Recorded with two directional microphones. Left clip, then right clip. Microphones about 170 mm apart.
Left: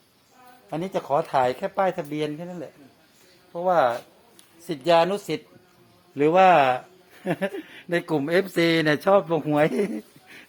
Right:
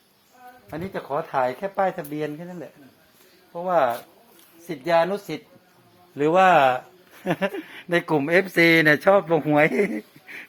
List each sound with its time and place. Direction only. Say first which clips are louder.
0.7 s speech: left 4 dB; 60° left (ahead or behind); by 2.5 s 30° left (ahead or behind)
3.5 s speech: left 1 dB; 30° left (ahead or behind)
4.6 s speech: left 1 dB; 50° left (ahead or behind)
6.1 s speech: even; 25° left (ahead or behind)
7.3 s speech: right 2 dB; 5° left (ahead or behind)